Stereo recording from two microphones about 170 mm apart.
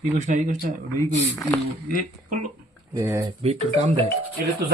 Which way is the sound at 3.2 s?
35° right (ahead or behind).